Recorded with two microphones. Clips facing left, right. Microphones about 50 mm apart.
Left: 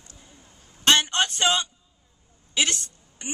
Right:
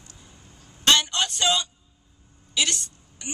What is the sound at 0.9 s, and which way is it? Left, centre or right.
A man's voice, left.